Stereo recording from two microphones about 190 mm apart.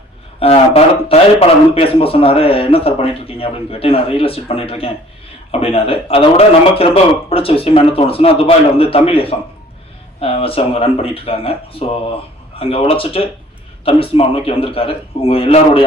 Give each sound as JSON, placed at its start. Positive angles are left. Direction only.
{"t": 0.3, "sound": "a man's voice", "side_deg": 30}